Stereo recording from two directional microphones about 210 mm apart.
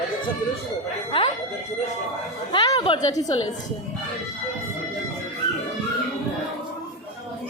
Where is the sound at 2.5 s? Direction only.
25° left (ahead or behind).